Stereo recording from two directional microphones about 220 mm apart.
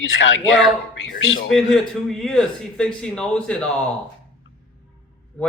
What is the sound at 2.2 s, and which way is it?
Speech, centre (ahead or behind).